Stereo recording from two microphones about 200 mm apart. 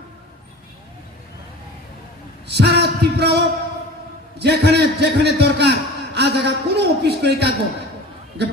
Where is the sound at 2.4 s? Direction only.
55° right (ahead or behind).